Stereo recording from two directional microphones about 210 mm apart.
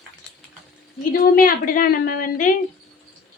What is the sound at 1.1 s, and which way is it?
A woman's voice, 40° left (ahead or behind).